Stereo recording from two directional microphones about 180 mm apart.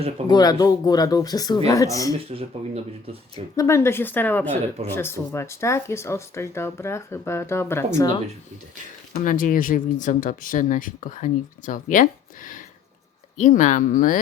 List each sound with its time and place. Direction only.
0.3 s speech: 20° left (ahead or behind)
2.3 s speech: 30° right (ahead or behind)
3.5 s speech: 15° left (ahead or behind)
9.1 s speech: 45° left (ahead or behind)